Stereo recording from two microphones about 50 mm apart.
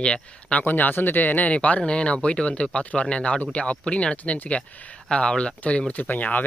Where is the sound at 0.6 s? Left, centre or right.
Left.